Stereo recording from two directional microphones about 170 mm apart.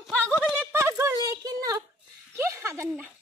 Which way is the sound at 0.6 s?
15° right (ahead or behind).